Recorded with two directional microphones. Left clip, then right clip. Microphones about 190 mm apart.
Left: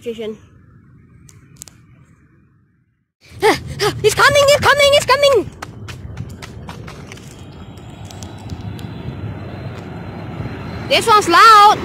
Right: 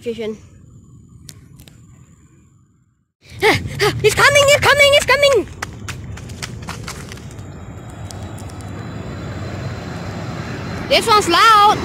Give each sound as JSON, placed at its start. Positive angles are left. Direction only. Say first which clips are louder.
{"t": 0.0, "sound": "a woman's voice", "louder": "right 1 dB", "side_deg": 0}
{"t": 3.3, "sound": "a sound", "louder": "even", "side_deg": 10}
{"t": 8.2, "sound": "vehicle", "louder": "even", "side_deg": 5}
{"t": 11.1, "sound": "speech", "louder": "left 4 dB", "side_deg": 15}